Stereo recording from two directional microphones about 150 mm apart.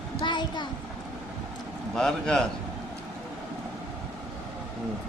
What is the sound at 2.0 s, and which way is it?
Speech, 5° left (ahead or behind).